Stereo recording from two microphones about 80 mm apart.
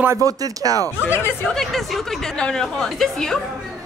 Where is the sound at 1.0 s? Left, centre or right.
Left.